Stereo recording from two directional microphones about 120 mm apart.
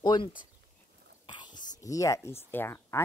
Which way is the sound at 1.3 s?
40° left (ahead or behind).